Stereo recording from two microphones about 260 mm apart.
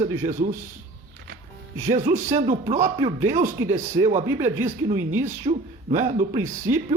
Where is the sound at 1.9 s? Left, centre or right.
Right.